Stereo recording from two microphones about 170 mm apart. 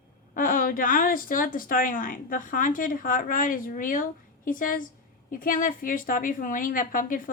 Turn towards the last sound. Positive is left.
turn(degrees=55)  # may be behind; listen again after turning